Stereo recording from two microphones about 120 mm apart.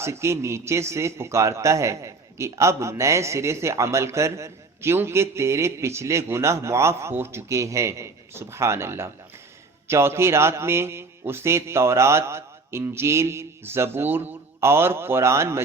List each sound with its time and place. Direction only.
0.0 s a man's voice: 25° right (ahead or behind)